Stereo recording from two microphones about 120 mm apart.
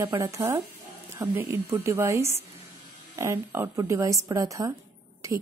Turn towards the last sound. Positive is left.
turn(degrees=-25)  # may be behind; listen again after turning